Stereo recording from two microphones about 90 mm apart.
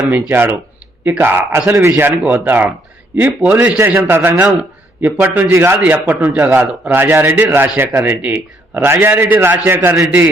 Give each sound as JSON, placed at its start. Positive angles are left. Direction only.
{"t": 0.0, "sound": "a man's voice", "side_deg": -20}
{"t": 5.7, "sound": "a man's voice", "side_deg": -15}